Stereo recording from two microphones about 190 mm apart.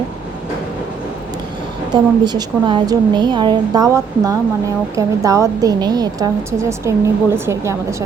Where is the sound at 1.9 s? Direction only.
20° right (ahead or behind).